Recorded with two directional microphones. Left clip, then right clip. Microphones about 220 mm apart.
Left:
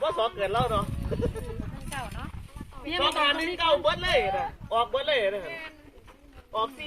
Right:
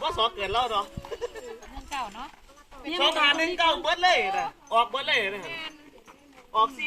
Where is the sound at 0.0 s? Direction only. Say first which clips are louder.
Even; 40° right (ahead or behind).